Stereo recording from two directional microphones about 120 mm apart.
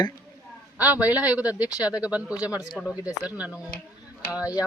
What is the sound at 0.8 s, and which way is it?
Speech, 15° right (ahead or behind).